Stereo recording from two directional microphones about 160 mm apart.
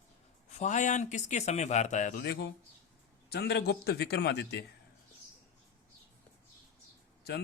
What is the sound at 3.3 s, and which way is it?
A man's voice, 90° left.